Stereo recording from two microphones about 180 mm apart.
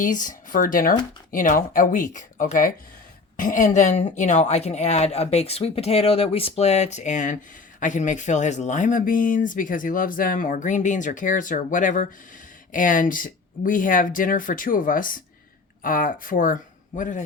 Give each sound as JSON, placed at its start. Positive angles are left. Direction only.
{"t": 0.0, "sound": "speech", "side_deg": 45}